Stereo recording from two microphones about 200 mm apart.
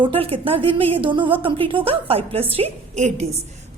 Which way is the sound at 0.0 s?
25° right (ahead or behind).